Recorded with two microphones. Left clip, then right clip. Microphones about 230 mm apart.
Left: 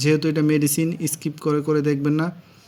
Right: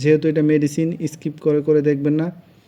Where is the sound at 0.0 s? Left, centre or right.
Centre.